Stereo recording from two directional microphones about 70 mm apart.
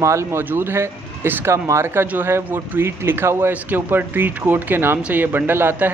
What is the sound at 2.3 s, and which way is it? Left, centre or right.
Speech, right.